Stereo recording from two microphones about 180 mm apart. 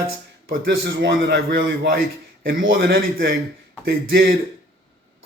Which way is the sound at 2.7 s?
55° right (ahead or behind).